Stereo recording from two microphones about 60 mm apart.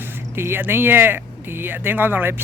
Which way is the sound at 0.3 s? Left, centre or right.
Right.